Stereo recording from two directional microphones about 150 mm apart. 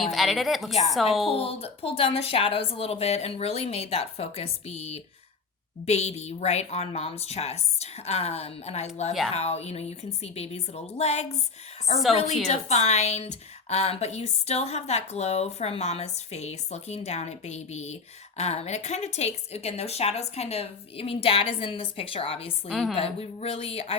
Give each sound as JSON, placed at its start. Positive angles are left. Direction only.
{"t": 0.0, "sound": "a woman's voice", "side_deg": 0}
{"t": 1.3, "sound": "a woman's voice", "side_deg": 40}
{"t": 22.7, "sound": "a woman's voice", "side_deg": 0}
{"t": 23.0, "sound": "speech", "side_deg": 40}